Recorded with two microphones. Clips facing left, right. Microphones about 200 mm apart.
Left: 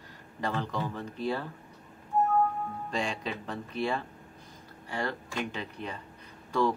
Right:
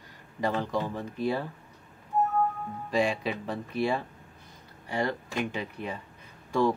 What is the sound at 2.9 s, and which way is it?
Speech, 10° right (ahead or behind).